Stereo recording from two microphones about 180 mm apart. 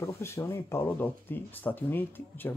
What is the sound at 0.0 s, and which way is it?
Speech, 15° left (ahead or behind).